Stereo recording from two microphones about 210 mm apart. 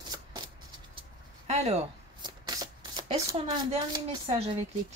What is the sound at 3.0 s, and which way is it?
Speech, 30° right (ahead or behind).